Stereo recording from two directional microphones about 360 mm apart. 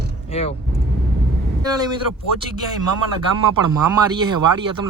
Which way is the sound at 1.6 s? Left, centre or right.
Centre.